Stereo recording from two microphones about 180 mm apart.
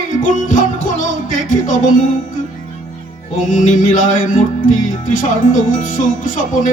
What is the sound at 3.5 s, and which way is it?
Music, 45° left (ahead or behind).